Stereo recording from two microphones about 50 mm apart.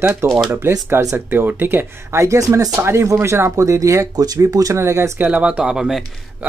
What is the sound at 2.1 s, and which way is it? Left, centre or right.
Speech, right.